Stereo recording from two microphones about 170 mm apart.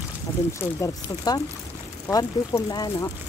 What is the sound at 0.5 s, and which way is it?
Speech, 20° left (ahead or behind).